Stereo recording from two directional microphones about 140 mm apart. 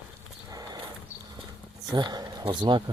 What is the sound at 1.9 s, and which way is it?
Speech, 30° right (ahead or behind).